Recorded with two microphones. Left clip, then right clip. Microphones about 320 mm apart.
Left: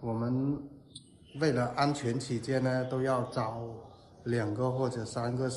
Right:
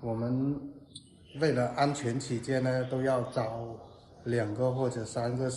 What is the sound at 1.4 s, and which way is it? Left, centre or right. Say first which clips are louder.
Speech: right 1 dB; centre.